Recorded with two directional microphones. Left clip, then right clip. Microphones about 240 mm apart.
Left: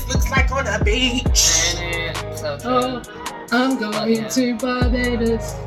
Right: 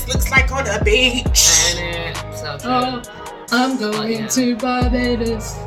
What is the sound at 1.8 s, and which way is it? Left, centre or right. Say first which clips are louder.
Music: even; centre.